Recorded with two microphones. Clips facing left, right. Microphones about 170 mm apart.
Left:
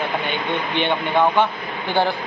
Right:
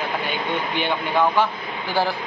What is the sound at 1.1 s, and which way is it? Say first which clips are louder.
Speech: left 2 dB; 20° left (ahead or behind).